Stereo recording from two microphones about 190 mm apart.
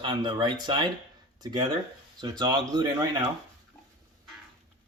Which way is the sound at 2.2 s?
20° right (ahead or behind).